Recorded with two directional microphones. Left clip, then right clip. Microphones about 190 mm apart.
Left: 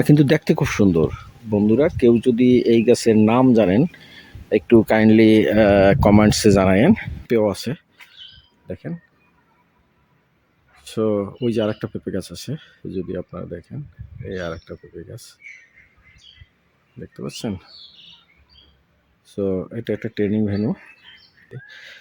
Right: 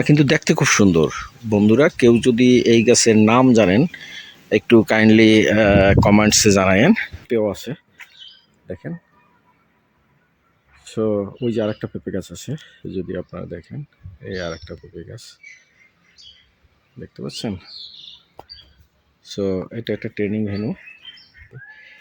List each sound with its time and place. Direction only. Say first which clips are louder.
0.0 s speech: even; 20° left (ahead or behind)
10.9 s speech: even; 10° left (ahead or behind)
19.3 s speech: right 1 dB; 10° left (ahead or behind); by 20.7 s 30° left (ahead or behind)
21.5 s fowl: left 2 dB; 30° left (ahead or behind)